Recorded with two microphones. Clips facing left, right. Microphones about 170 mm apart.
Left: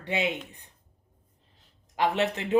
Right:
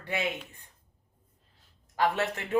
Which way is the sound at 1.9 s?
20° left (ahead or behind).